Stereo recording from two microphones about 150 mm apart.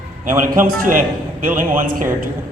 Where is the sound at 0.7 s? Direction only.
65° right (ahead or behind).